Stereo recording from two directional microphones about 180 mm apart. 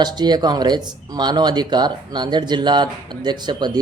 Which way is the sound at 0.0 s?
25° right (ahead or behind).